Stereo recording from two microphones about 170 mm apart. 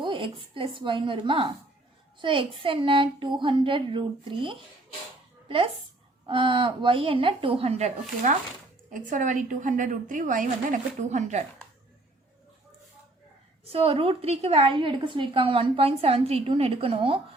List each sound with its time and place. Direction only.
0.0 s a woman's voice: 30° right (ahead or behind)
8.9 s a woman's voice: 50° right (ahead or behind)
13.7 s a woman's voice: 35° right (ahead or behind)